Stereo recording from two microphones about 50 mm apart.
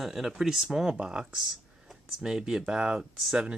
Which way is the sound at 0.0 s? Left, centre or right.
Centre.